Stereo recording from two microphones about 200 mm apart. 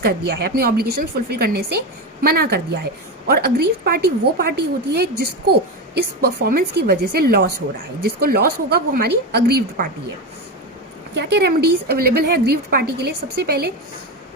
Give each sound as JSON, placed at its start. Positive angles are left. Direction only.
{"t": 0.0, "sound": "a woman's voice", "side_deg": -50}
{"t": 11.2, "sound": "a woman's voice", "side_deg": -55}